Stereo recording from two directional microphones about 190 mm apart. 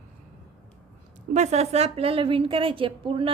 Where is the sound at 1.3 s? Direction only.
35° right (ahead or behind).